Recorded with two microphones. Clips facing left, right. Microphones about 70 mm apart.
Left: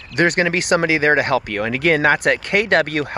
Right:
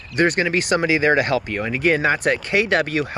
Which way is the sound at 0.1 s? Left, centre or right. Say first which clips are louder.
Left 1 dB; left.